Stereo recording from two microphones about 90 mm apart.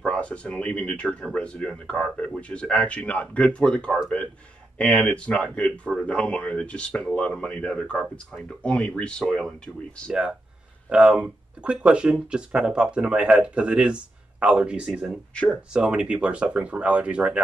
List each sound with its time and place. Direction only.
0.0 s speech: 10° left (ahead or behind)
10.9 s speech: 10° right (ahead or behind)